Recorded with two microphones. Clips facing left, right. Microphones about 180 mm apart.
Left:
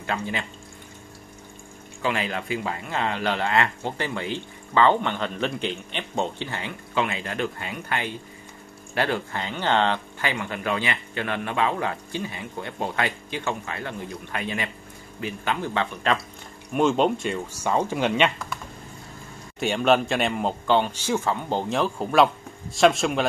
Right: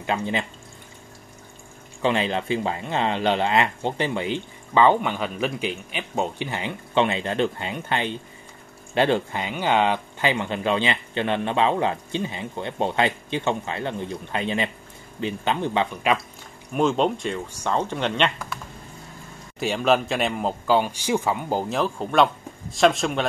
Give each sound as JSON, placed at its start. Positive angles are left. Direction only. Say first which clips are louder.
{"t": 0.0, "sound": "speech", "louder": "right 3 dB", "side_deg": -20}
{"t": 2.0, "sound": "speech", "louder": "right 4 dB", "side_deg": -25}
{"t": 16.7, "sound": "speech", "louder": "even", "side_deg": 0}
{"t": 19.6, "sound": "speech", "louder": "even", "side_deg": 0}